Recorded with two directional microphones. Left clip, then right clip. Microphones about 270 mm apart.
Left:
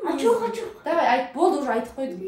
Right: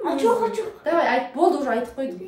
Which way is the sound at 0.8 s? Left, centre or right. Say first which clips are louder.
Even; centre.